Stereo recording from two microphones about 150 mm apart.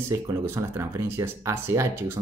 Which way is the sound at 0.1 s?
20° right (ahead or behind).